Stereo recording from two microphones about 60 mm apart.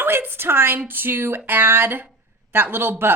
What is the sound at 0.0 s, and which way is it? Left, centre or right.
A woman's voice, right.